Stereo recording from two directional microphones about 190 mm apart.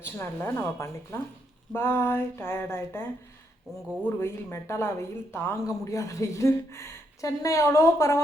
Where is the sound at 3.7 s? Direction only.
Centre (ahead or behind).